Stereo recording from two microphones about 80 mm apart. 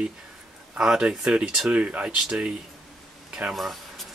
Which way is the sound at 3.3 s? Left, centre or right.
Centre.